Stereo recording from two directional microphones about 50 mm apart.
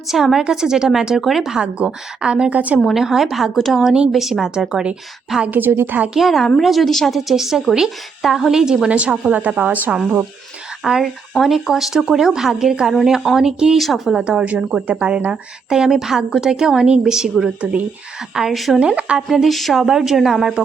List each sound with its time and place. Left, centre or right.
0.1 s a woman's voice: centre
1.6 s a woman's voice: right
2.5 s a woman's voice: right
2.9 s a woman's voice: centre
5.5 s a woman's voice: right
6.1 s a woman's voice: centre
8.9 s a woman's voice: right
11.0 s a woman's voice: centre
14.2 s a woman's voice: right
17.6 s a woman's voice: right
18.3 s speech: centre
18.8 s a woman's voice: right
19.3 s speech: centre